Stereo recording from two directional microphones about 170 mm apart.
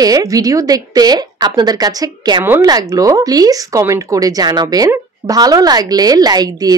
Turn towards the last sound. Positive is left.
turn(degrees=-25)  # may be behind; listen again after turning